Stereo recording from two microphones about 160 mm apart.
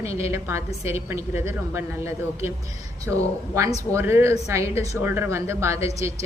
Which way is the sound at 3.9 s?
15° right (ahead or behind).